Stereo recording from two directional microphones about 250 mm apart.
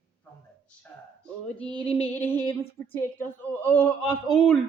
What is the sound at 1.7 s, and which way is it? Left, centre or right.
Female singing, left.